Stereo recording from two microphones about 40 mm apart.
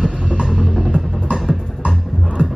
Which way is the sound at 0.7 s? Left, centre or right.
Right.